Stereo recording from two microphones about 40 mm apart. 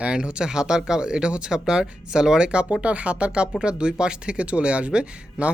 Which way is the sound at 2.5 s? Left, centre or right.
Right.